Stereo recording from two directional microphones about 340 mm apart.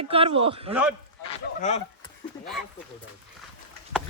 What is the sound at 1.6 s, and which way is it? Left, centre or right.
Speech, left.